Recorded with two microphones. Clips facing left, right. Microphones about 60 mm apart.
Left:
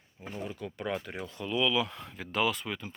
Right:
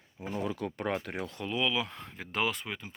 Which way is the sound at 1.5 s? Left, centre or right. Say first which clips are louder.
Left 3 dB; right.